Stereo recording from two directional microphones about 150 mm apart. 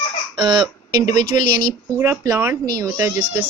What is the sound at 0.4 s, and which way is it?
Speech, 30° right (ahead or behind).